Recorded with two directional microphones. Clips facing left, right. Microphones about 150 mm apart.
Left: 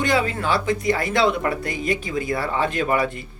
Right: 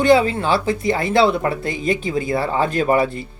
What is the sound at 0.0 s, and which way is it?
Speech, 30° right (ahead or behind).